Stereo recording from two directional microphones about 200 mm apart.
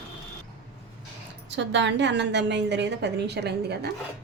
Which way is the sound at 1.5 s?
60° right (ahead or behind).